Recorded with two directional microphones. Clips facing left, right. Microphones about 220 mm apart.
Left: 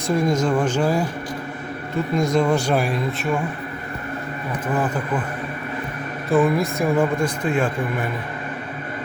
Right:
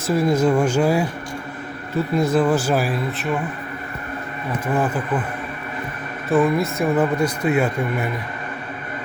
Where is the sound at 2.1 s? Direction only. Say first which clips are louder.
Right 1 dB; 5° right (ahead or behind).